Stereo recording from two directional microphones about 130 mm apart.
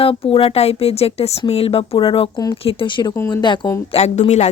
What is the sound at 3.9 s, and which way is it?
Speech, 55° left (ahead or behind).